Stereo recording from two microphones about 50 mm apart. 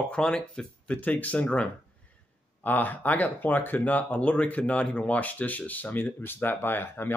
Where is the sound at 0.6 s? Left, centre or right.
Left.